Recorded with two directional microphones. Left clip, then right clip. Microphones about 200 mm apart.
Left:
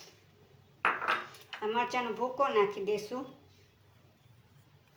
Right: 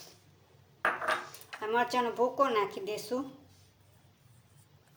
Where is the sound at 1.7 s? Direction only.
50° right (ahead or behind).